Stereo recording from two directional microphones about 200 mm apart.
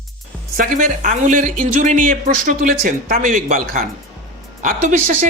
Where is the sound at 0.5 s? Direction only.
45° right (ahead or behind).